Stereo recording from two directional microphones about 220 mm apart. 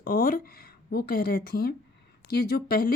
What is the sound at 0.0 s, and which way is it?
Speech, 40° left (ahead or behind).